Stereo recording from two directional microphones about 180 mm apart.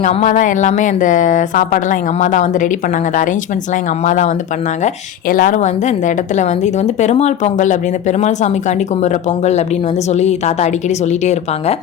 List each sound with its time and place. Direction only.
0.0 s speech: 40° left (ahead or behind)
4.0 s a woman's voice: 40° left (ahead or behind)
5.3 s a woman's voice: 45° left (ahead or behind)